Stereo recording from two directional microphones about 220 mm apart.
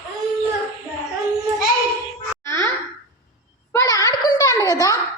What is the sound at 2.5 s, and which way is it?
Babbling, 10° left (ahead or behind).